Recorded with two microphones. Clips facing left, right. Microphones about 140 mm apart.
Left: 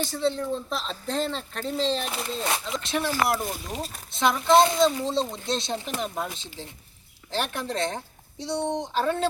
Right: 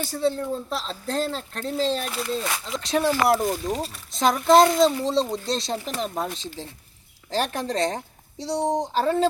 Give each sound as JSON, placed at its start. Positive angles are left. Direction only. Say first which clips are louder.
{"t": 0.0, "sound": "speech", "louder": "right 2 dB", "side_deg": -10}
{"t": 2.0, "sound": "speech", "louder": "right 2 dB", "side_deg": 25}
{"t": 2.9, "sound": "speech", "louder": "right 5 dB", "side_deg": -40}
{"t": 7.3, "sound": "speech", "louder": "right 4 dB", "side_deg": -40}